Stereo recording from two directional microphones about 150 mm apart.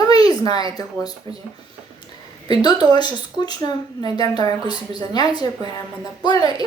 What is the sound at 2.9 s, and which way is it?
Speech, 30° left (ahead or behind).